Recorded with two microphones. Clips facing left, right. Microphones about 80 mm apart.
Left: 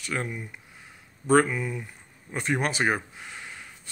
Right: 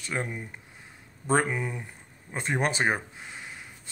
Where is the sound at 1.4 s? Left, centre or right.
Right.